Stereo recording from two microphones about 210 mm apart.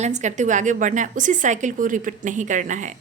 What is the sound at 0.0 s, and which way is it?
Speech, 35° right (ahead or behind).